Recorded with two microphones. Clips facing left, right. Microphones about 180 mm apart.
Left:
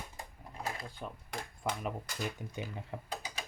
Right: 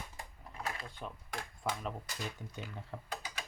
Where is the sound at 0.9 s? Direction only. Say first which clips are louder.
Left 1 dB; centre (ahead or behind).